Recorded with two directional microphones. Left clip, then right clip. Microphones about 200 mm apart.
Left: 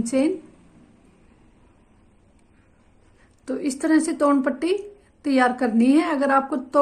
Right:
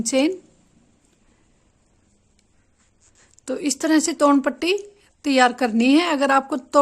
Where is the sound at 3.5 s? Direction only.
35° right (ahead or behind).